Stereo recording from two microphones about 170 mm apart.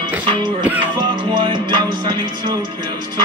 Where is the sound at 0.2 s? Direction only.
25° right (ahead or behind).